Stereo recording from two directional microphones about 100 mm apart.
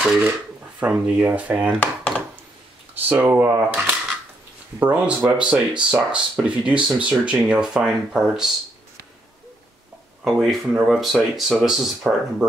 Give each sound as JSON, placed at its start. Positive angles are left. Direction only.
{"t": 0.7, "sound": "speech", "side_deg": -15}
{"t": 1.8, "sound": "chopping", "side_deg": 15}
{"t": 2.9, "sound": "speech", "side_deg": -15}
{"t": 10.2, "sound": "speech", "side_deg": 0}